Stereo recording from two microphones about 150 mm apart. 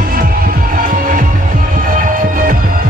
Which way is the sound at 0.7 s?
65° right (ahead or behind).